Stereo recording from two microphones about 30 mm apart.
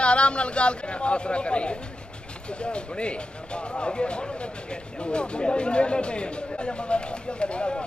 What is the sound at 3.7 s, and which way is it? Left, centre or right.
Speech, left.